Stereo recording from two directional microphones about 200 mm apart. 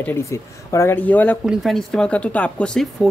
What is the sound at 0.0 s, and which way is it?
Speech, 15° left (ahead or behind).